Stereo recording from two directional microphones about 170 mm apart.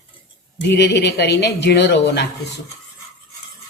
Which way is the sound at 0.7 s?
90° left.